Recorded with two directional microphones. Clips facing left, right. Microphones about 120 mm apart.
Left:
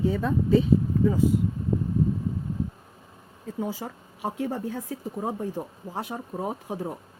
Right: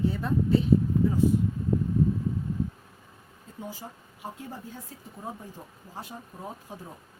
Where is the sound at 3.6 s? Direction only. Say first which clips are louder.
Left 7 dB; 90° left.